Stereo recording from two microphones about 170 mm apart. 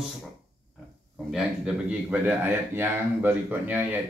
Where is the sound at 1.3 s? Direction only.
5° right (ahead or behind).